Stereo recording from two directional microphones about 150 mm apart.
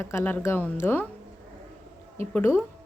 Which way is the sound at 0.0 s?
15° left (ahead or behind).